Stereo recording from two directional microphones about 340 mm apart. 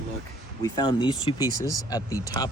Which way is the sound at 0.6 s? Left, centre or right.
Centre.